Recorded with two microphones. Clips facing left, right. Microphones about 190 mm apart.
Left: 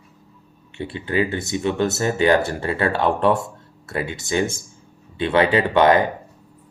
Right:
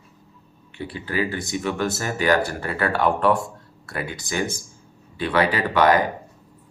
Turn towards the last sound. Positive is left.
turn(degrees=25)  # may be behind; listen again after turning